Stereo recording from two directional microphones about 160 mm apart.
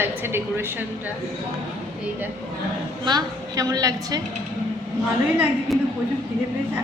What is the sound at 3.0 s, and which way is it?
A woman's voice, 25° right (ahead or behind).